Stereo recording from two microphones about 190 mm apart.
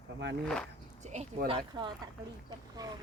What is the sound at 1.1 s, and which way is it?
Speech, 30° right (ahead or behind).